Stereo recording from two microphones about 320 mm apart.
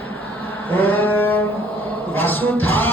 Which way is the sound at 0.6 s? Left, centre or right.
Centre.